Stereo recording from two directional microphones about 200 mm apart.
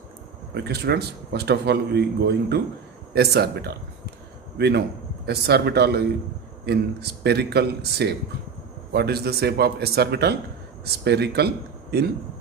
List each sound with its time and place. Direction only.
0.5 s a man's voice: 55° right (ahead or behind)